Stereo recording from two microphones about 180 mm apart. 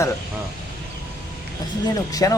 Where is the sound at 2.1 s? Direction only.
20° left (ahead or behind).